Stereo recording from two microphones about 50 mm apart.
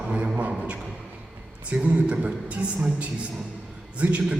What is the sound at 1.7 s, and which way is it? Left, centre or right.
A man's voice, right.